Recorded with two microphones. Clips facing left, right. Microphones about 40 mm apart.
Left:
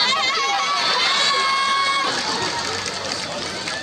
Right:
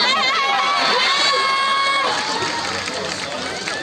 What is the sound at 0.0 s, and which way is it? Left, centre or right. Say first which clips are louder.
Chatter: right 3 dB; right.